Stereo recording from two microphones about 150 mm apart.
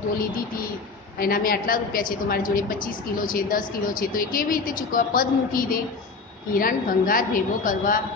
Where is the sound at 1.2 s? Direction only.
75° left (ahead or behind).